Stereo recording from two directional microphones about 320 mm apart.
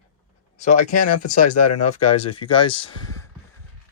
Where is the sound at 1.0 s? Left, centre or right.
Left.